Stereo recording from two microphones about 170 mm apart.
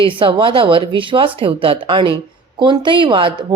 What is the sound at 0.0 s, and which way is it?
Speech, 30° right (ahead or behind).